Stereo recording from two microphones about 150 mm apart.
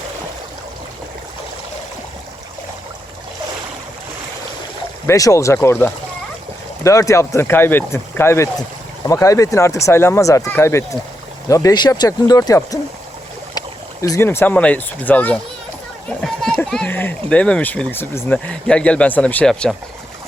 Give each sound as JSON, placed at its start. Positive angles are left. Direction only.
{"t": 5.0, "sound": "speech", "side_deg": 20}
{"t": 6.8, "sound": "speech", "side_deg": 20}